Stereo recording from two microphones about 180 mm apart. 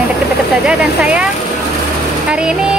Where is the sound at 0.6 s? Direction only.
5° right (ahead or behind).